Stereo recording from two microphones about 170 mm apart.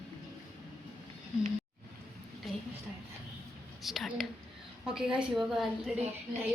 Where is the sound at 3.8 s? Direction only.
Centre (ahead or behind).